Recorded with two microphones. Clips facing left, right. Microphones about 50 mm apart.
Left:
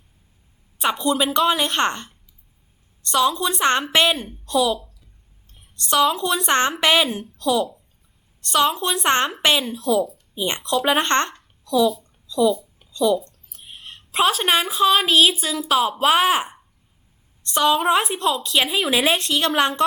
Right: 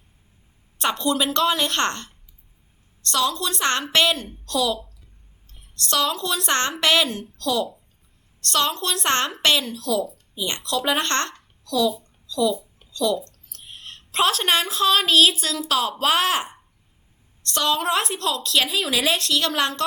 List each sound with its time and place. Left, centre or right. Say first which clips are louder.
0.8 s speech: left 2 dB; centre
5.9 s speech: left 5 dB; centre
12.5 s a sound: left 4 dB; centre
12.9 s a woman's voice: left 4 dB; centre